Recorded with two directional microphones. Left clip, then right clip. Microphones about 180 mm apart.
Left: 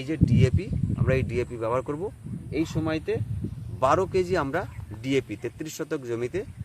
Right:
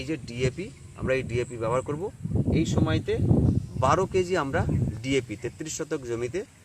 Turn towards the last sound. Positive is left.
turn(degrees=10)  # may be behind; listen again after turning